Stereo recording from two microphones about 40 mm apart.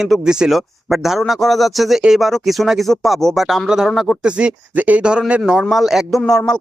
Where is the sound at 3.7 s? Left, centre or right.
Centre.